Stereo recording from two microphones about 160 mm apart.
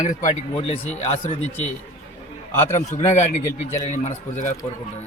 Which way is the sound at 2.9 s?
45° left (ahead or behind).